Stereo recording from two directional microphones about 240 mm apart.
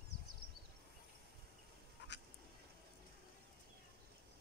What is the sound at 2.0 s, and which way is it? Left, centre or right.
Duck, left.